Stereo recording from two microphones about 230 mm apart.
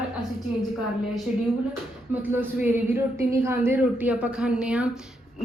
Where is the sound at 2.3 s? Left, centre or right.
Centre.